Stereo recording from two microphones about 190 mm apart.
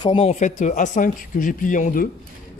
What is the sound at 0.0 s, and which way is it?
Speech, 30° left (ahead or behind).